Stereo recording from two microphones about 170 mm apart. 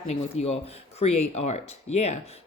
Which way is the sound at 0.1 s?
40° left (ahead or behind).